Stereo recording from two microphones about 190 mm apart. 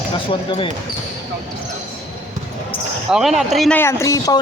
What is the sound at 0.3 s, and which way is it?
Speech, 30° left (ahead or behind).